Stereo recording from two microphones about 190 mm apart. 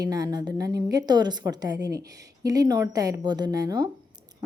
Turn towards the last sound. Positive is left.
turn(degrees=-20)  # may be behind; listen again after turning